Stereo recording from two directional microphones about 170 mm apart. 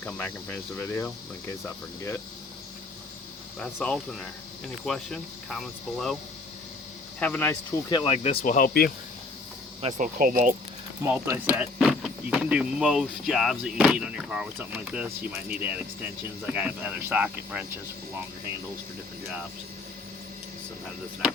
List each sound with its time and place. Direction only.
0.0 s speech: 10° left (ahead or behind)
3.6 s speech: 5° left (ahead or behind)
7.2 s speech: 10° left (ahead or behind)
7.9 s speech: 25° left (ahead or behind)
8.1 s speech: 35° left (ahead or behind)
8.4 s speech: 55° left (ahead or behind)
9.8 s speech: 50° right (ahead or behind)
11.0 s speech: 15° right (ahead or behind)